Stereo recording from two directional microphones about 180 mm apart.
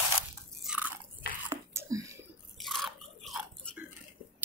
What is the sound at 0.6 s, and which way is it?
Biting, 5° right (ahead or behind).